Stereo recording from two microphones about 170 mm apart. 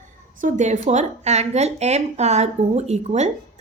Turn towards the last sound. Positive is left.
turn(degrees=-40)  # may be behind; listen again after turning